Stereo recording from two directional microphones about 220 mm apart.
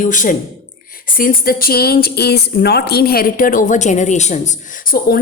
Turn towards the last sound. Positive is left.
turn(degrees=40)  # may be behind; listen again after turning